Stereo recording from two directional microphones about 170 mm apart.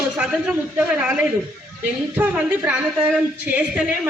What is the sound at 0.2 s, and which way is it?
A woman's voice, 5° right (ahead or behind).